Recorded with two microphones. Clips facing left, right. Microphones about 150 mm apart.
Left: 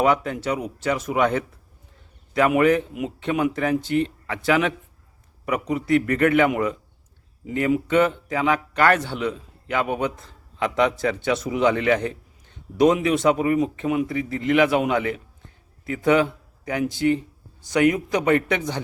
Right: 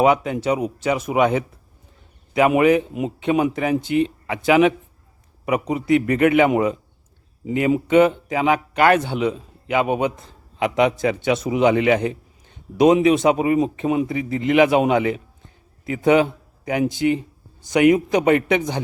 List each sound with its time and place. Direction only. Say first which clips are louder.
0.0 s a man's voice: right 4 dB; 15° right (ahead or behind)